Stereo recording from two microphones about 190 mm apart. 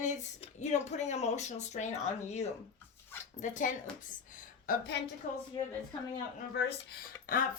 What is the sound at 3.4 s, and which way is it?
A woman's voice, 40° left (ahead or behind).